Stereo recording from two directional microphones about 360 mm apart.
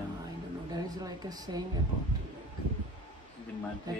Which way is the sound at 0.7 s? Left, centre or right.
Centre.